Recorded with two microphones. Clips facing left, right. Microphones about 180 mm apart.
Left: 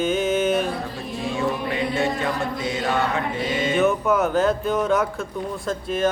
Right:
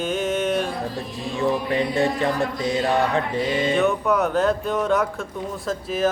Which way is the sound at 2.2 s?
35° right (ahead or behind).